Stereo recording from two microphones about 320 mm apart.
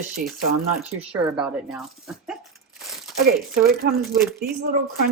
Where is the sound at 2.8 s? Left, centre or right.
Centre.